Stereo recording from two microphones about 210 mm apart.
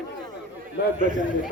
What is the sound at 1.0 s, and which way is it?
Speech, 40° right (ahead or behind).